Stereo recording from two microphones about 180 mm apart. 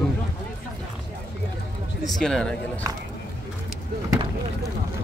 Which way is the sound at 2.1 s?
Centre (ahead or behind).